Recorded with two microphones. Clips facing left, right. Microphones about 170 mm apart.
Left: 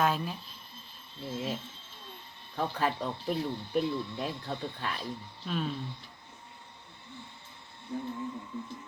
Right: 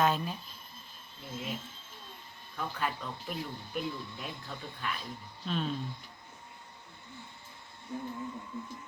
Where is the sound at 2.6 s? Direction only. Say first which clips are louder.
Left 5 dB; 35° left (ahead or behind).